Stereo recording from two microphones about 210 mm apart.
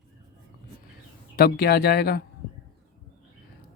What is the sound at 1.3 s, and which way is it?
Speech, 50° left (ahead or behind).